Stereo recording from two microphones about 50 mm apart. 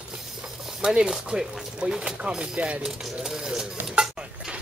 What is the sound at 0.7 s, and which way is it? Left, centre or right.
Chopping, centre.